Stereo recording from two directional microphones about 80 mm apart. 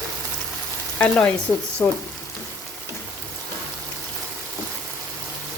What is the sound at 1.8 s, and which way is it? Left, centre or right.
Speech, left.